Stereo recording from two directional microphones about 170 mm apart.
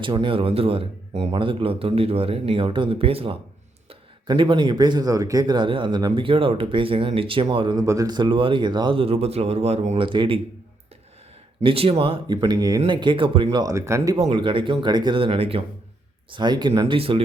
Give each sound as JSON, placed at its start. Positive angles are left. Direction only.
{"t": 0.0, "sound": "speech", "side_deg": -30}
{"t": 11.6, "sound": "speech", "side_deg": -35}
{"t": 14.2, "sound": "speech", "side_deg": -30}